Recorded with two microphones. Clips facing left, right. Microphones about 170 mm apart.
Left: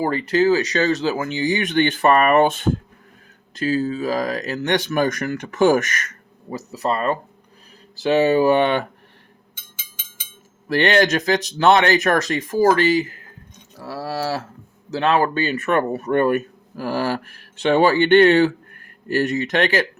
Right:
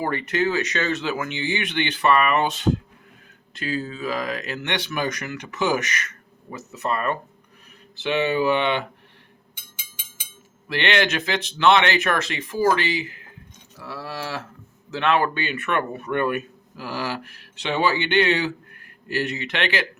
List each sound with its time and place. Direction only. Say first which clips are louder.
0.0 s speech: left 5 dB; 30° left (ahead or behind); by 2.7 s 50° left (ahead or behind)
3.5 s speech: left 7 dB; 40° left (ahead or behind)
6.5 s speech: left 4 dB; 35° left (ahead or behind)
10.7 s speech: left 6 dB; 40° left (ahead or behind)